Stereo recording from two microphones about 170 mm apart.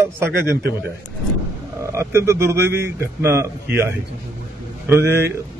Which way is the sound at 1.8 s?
15° right (ahead or behind).